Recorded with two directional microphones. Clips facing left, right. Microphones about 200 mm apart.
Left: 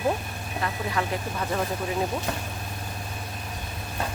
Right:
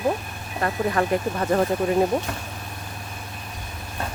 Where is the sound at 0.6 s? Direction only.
50° right (ahead or behind).